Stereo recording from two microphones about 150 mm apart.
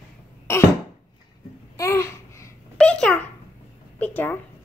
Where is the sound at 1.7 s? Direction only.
20° left (ahead or behind).